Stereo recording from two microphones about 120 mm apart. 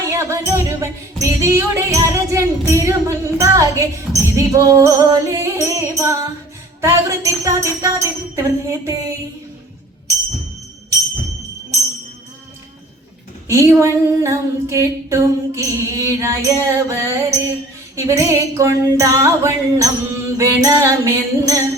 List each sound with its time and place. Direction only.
0.1 s music: 25° right (ahead or behind)
4.4 s female singing: 25° right (ahead or behind)
13.5 s female singing: 25° right (ahead or behind)